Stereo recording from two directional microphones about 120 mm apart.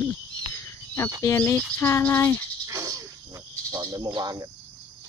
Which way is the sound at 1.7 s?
20° left (ahead or behind).